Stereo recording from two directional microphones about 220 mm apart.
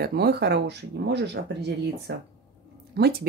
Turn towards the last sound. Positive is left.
turn(degrees=-50)  # may be behind; listen again after turning